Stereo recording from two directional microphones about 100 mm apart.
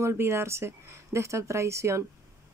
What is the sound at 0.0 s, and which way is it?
Speech, 25° right (ahead or behind).